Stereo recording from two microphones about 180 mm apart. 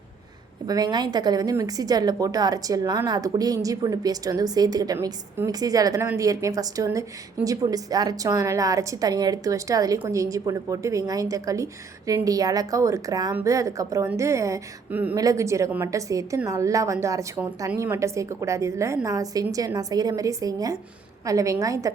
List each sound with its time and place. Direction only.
0.7 s a woman's voice: 20° right (ahead or behind)